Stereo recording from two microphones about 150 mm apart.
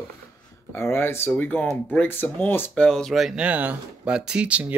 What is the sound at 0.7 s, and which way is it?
Speech, 15° left (ahead or behind).